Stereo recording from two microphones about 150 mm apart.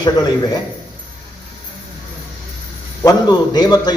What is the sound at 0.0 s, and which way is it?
Speech, 30° left (ahead or behind).